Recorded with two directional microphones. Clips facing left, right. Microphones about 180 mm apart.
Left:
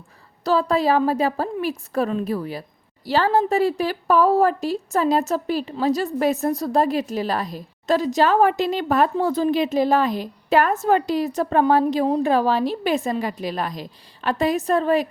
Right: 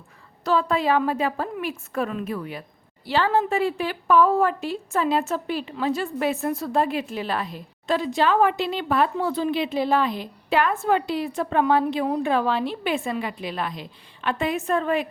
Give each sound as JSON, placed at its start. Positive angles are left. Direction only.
{"t": 0.4, "sound": "a woman's voice", "side_deg": 35}